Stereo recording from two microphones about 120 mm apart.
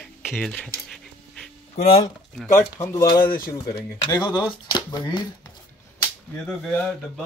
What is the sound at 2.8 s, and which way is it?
Speech, 25° left (ahead or behind).